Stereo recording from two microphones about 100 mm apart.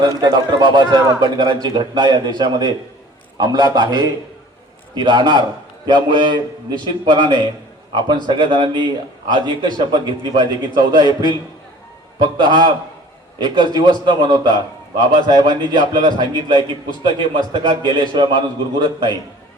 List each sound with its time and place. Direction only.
0.0 s a man's voice: 45° right (ahead or behind)